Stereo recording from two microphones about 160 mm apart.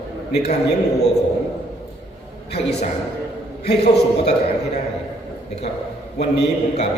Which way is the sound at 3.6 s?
90° left.